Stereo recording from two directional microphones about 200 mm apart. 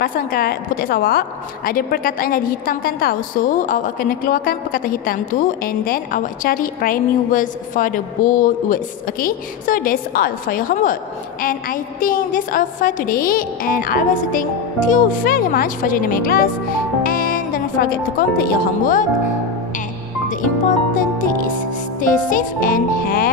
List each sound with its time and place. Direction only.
0.0 s a woman's voice: 45° left (ahead or behind)
17.0 s music: 45° left (ahead or behind)
18.4 s a woman's voice: 45° left (ahead or behind)
20.9 s music: 40° left (ahead or behind)
22.0 s a woman's voice: 40° left (ahead or behind)